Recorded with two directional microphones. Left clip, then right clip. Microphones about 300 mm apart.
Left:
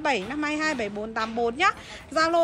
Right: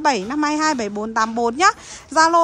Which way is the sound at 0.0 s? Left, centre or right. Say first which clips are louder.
Right 7 dB; centre.